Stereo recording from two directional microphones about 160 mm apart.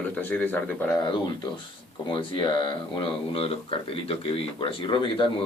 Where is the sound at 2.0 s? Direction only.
35° left (ahead or behind).